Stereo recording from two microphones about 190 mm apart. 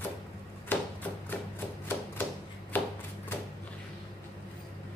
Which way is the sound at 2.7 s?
10° left (ahead or behind).